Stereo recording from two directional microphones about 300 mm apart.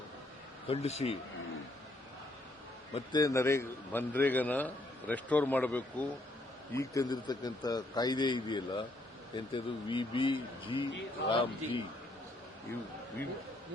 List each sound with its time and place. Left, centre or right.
0.7 s speech: left
2.9 s a man's voice: centre